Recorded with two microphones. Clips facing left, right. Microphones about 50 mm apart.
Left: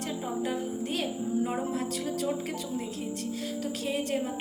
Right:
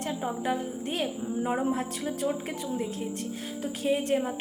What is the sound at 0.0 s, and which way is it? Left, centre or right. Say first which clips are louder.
A woman's voice: right 1 dB; right.